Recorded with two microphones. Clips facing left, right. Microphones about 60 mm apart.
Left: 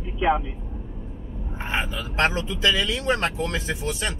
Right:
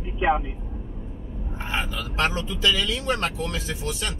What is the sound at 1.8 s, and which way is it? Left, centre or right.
Speech, left.